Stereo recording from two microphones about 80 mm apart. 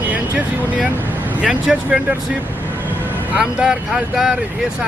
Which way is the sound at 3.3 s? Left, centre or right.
Centre.